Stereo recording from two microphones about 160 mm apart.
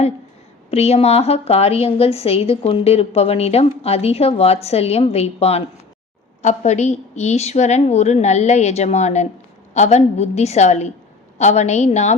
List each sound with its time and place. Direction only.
0.7 s a woman's voice: 40° left (ahead or behind)